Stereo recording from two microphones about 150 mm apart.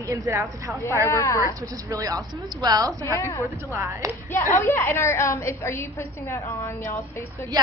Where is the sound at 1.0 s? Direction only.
20° left (ahead or behind).